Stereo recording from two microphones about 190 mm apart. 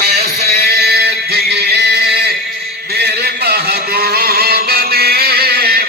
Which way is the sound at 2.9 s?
60° right (ahead or behind).